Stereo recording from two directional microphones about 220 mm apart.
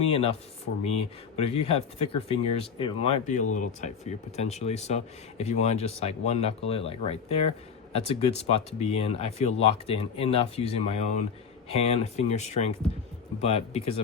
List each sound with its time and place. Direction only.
0.9 s speech: 30° left (ahead or behind)